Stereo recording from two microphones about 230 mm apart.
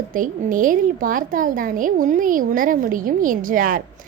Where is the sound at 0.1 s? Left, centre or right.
Right.